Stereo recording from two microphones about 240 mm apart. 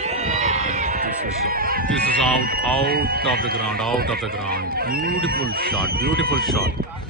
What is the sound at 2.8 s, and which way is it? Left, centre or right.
Speech, right.